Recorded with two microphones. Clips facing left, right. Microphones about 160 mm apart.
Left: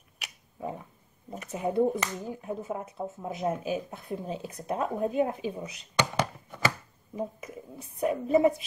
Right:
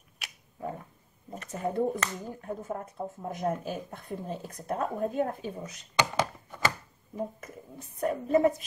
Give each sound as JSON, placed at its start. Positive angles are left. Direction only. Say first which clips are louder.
{"t": 0.2, "sound": "a sound", "louder": "left 1 dB", "side_deg": 10}
{"t": 1.3, "sound": "speech", "louder": "left 3 dB", "side_deg": 5}
{"t": 7.2, "sound": "speech", "louder": "left 1 dB", "side_deg": 10}